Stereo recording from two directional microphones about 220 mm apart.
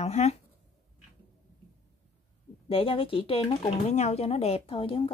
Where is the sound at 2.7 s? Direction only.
25° left (ahead or behind).